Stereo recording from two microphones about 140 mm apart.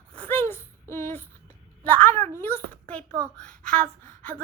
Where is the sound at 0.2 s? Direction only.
15° left (ahead or behind).